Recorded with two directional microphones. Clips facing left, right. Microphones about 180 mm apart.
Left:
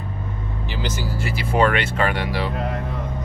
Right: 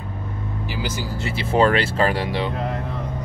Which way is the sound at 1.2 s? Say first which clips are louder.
Right 1 dB; 25° right (ahead or behind).